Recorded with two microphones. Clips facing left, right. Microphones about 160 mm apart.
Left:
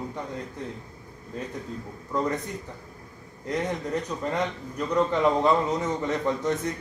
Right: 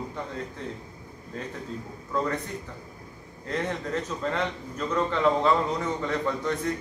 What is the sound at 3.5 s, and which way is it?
A man's voice, 15° left (ahead or behind).